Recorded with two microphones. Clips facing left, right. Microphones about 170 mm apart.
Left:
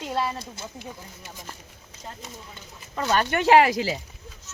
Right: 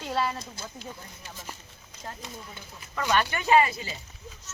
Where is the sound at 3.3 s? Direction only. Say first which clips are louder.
Left 7 dB; 75° left (ahead or behind).